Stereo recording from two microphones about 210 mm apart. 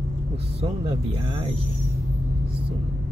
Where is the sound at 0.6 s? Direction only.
25° right (ahead or behind).